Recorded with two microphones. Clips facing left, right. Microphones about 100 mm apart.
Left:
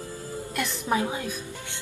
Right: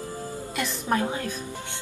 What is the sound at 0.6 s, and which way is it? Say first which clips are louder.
Music: even; 5° left (ahead or behind).